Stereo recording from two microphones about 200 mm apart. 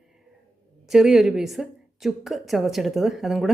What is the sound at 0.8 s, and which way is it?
Speech, centre (ahead or behind).